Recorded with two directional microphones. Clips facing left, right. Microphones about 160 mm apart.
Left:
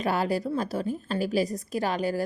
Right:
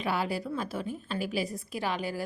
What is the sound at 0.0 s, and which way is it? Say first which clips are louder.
A woman's voice: left 5 dB; 40° left (ahead or behind).